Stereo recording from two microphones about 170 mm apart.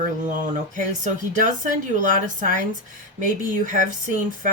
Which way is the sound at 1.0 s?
50° right (ahead or behind).